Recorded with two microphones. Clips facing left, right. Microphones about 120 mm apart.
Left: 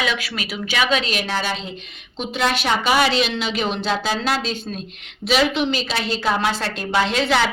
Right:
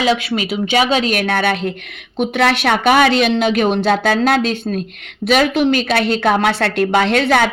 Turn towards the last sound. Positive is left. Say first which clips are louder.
# right 5 dB
turn(degrees=-50)  # may be behind; listen again after turning